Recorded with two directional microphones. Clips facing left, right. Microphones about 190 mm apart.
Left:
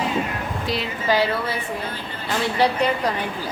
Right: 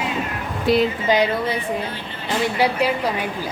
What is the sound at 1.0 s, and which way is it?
Speech, 15° right (ahead or behind).